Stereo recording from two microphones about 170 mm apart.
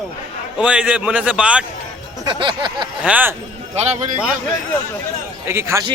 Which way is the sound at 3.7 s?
40° right (ahead or behind).